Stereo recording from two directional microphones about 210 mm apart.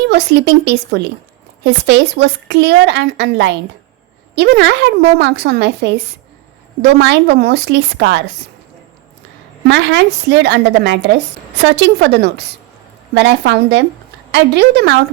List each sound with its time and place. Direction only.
0.1 s speech: 55° right (ahead or behind)
9.6 s speech: 55° right (ahead or behind)